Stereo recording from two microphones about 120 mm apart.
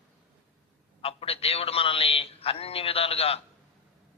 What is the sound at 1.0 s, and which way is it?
A man's voice, 55° left (ahead or behind).